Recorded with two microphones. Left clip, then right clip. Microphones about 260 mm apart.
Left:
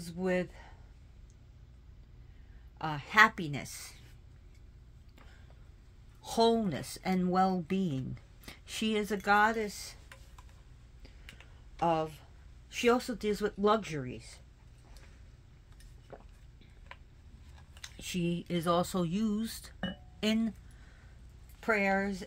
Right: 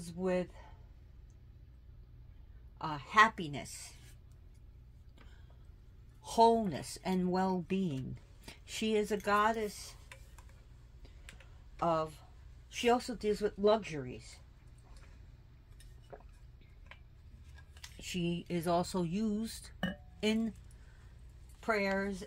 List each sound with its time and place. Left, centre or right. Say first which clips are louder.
0.0 s speech: left 2 dB; centre
2.8 s speech: left 2 dB; centre
6.2 s speech: right 1 dB; centre
11.7 s speech: left 2 dB; centre
16.1 s a sound: left 1 dB; centre
17.8 s speech: left 2 dB; centre
21.5 s speech: left 4 dB; centre